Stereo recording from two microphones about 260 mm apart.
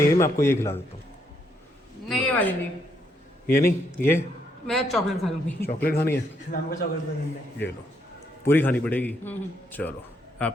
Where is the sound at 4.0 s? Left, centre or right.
Centre.